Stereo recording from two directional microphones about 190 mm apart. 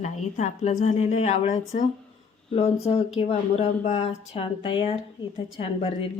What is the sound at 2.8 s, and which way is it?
Speech, 30° left (ahead or behind).